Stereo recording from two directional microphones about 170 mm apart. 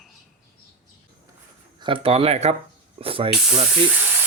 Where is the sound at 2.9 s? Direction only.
35° right (ahead or behind).